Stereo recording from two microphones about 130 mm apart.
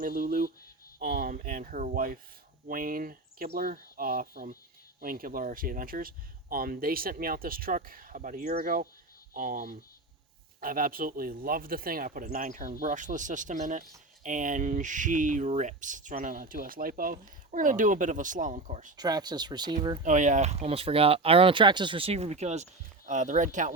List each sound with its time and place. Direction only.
0.0 s speech: 90° right
18.9 s speech: 30° right (ahead or behind)
20.0 s speech: 70° right (ahead or behind)